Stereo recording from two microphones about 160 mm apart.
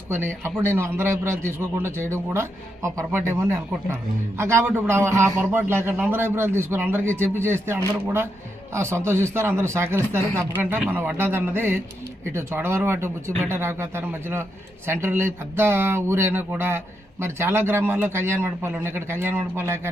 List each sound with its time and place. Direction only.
0.4 s speech: 15° right (ahead or behind)